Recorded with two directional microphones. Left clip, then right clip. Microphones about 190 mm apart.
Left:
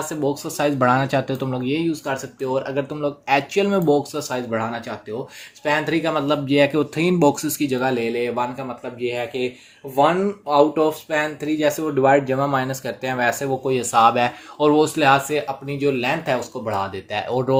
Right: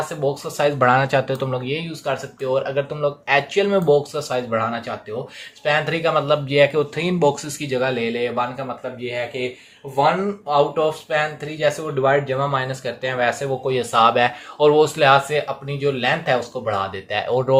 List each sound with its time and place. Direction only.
0.1 s speech: 35° left (ahead or behind)
10.5 s speech: 45° left (ahead or behind); by 17.6 s 30° left (ahead or behind)